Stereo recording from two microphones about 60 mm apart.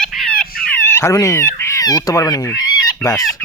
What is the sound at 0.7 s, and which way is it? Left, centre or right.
Frog, left.